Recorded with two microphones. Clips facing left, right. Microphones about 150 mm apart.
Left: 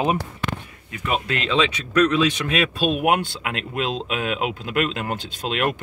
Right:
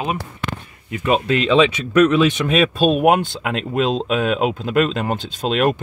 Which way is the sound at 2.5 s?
40° right (ahead or behind).